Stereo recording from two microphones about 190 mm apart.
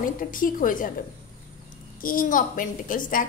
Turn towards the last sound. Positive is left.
turn(degrees=45)  # may be behind; listen again after turning